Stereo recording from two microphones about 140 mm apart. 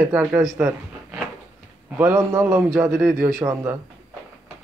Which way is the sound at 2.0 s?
15° right (ahead or behind).